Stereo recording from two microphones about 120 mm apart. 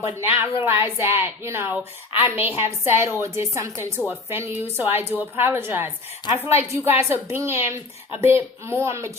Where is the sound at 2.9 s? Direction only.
20° right (ahead or behind).